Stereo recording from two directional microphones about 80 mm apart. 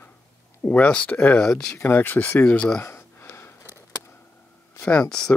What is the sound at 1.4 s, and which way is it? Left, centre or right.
Speech, centre.